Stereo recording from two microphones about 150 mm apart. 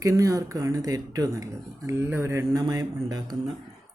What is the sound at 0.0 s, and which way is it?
Speech, 20° right (ahead or behind).